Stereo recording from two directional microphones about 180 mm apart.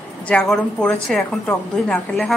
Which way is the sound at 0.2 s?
5° left (ahead or behind).